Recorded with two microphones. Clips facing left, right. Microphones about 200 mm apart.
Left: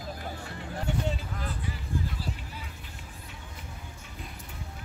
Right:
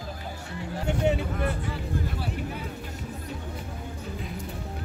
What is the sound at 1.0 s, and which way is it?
Vehicle, 65° right (ahead or behind).